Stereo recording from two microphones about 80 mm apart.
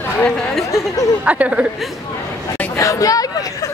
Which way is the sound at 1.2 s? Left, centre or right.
Centre.